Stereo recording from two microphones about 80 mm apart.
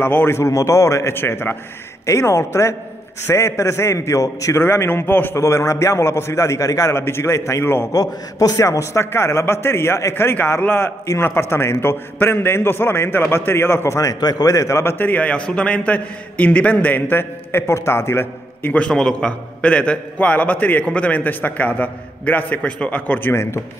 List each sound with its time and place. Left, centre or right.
0.0 s a man's voice: left
7.9 s a man's voice: left
18.8 s a man's voice: centre
23.3 s a man's voice: left